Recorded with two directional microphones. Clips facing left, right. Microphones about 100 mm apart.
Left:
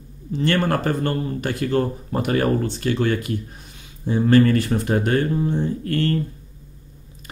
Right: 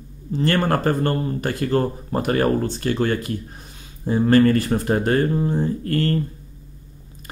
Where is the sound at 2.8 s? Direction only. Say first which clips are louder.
Even; 40° right (ahead or behind).